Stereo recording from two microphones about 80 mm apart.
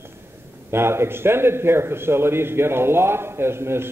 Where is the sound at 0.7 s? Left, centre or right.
Right.